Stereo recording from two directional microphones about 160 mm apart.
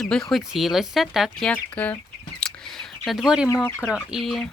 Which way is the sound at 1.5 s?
10° left (ahead or behind).